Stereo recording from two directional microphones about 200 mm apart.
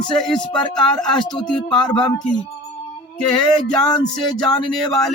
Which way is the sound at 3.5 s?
5° left (ahead or behind).